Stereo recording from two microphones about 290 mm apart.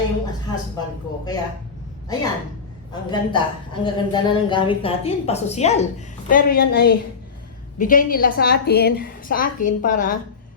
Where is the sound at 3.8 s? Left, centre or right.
Centre.